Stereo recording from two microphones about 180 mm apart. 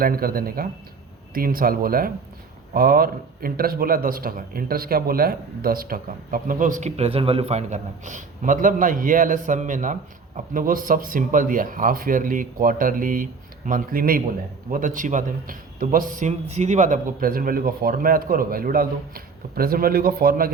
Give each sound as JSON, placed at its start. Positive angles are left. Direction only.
{"t": 0.0, "sound": "a man's voice", "side_deg": -55}